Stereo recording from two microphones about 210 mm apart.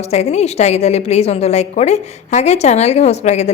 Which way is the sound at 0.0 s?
30° left (ahead or behind).